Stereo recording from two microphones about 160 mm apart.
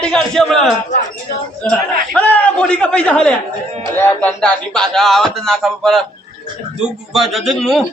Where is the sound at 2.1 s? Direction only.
10° left (ahead or behind).